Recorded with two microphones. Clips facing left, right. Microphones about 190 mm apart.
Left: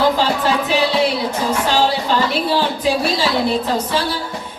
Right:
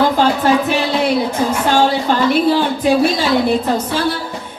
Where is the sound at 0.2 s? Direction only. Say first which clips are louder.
Right 4 dB; 55° right (ahead or behind).